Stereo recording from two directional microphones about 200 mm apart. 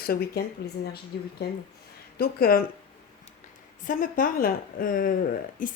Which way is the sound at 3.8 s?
40° left (ahead or behind).